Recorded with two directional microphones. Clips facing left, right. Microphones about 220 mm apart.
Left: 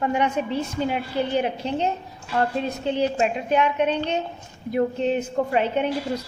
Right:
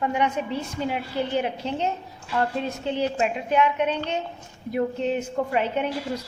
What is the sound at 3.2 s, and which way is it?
Speech, 30° left (ahead or behind).